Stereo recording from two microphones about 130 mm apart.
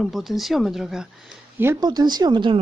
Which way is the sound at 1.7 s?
35° right (ahead or behind).